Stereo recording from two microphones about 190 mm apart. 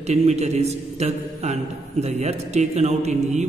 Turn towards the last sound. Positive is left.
turn(degrees=-35)  # may be behind; listen again after turning